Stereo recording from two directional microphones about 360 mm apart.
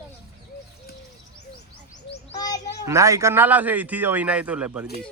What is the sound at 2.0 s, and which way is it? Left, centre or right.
Bird, left.